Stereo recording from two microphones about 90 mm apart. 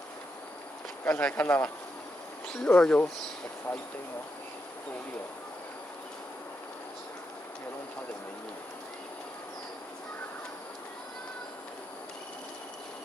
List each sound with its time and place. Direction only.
1.0 s speech: 20° left (ahead or behind)